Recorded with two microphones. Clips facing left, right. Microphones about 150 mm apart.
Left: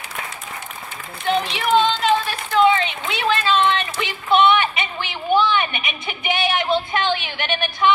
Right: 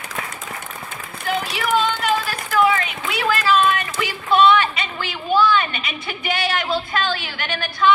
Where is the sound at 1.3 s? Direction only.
25° left (ahead or behind).